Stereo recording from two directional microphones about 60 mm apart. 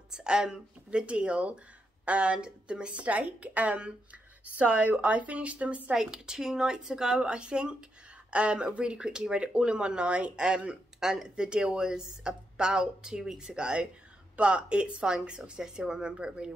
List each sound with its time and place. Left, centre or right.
0.1 s speech: centre